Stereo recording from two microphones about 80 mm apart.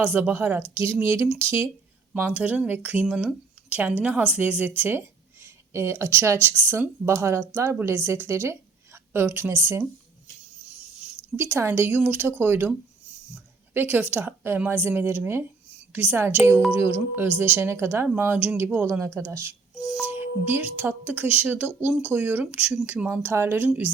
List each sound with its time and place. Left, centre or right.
0.0 s speech: right
0.7 s a woman's voice: right
2.1 s a woman's voice: centre; by 9.8 s right
11.3 s speech: right
13.9 s a woman's voice: right
18.1 s a woman's voice: right
20.1 s speech: right
23.2 s speech: right